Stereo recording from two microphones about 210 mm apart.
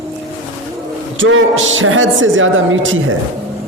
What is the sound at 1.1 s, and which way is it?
A woman's voice, 65° right (ahead or behind).